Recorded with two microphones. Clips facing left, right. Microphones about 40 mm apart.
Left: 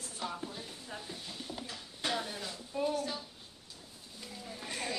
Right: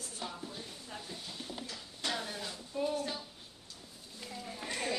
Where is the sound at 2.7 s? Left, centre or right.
Left.